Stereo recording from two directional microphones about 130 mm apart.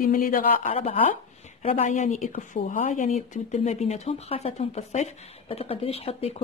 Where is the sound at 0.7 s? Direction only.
50° left (ahead or behind).